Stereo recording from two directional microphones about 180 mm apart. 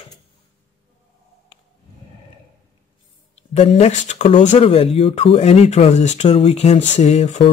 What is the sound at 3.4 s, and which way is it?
Speech, 35° left (ahead or behind).